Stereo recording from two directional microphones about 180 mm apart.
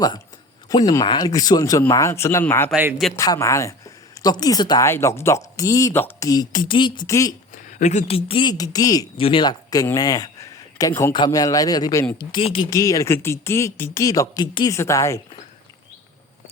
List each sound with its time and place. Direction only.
0.7 s speech: 20° left (ahead or behind)
7.5 s speech: 40° left (ahead or behind)
12.7 s speech: 20° left (ahead or behind)